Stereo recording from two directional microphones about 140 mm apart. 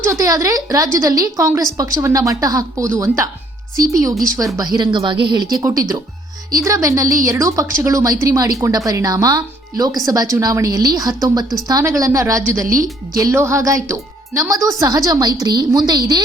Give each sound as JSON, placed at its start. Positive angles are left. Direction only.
{"t": 0.0, "sound": "speech", "side_deg": -20}
{"t": 12.6, "sound": "a woman's voice", "side_deg": -75}
{"t": 13.1, "sound": "speech", "side_deg": -20}